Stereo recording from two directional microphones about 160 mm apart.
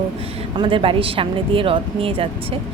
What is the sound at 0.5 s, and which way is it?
Speech, 35° right (ahead or behind).